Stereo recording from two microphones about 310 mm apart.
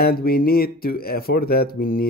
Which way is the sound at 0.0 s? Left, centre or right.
Left.